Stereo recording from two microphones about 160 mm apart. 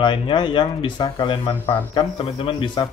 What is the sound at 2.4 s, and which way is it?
Speech, 35° left (ahead or behind).